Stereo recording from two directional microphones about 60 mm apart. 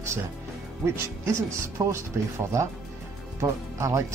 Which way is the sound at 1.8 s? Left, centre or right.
Right.